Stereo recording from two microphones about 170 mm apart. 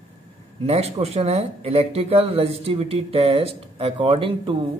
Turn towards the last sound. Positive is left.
turn(degrees=-35)  # may be behind; listen again after turning